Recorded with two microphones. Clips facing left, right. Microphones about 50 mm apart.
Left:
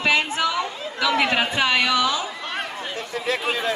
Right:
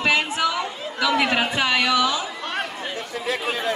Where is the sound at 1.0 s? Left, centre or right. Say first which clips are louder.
Even; left.